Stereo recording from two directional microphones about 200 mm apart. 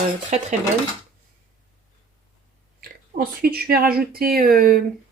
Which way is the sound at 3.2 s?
50° right (ahead or behind).